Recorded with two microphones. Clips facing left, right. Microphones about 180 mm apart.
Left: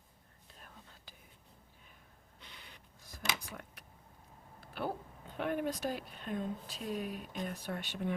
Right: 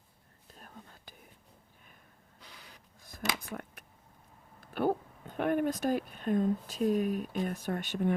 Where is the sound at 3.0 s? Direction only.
50° right (ahead or behind).